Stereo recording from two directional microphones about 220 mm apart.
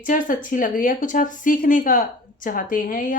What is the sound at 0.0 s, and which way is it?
Speech, 35° left (ahead or behind).